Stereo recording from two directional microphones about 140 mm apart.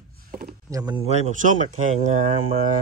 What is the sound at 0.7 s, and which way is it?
Speech, 20° right (ahead or behind).